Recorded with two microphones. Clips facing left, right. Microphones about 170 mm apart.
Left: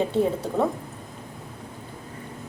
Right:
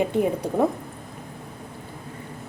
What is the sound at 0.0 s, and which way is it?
Speech, 15° right (ahead or behind).